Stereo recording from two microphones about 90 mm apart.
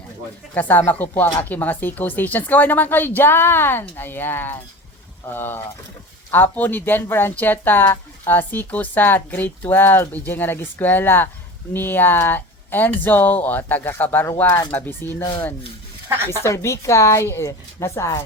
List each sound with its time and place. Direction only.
0.5 s speech: 20° left (ahead or behind)
16.0 s speech: 30° right (ahead or behind)
16.4 s speech: 30° left (ahead or behind)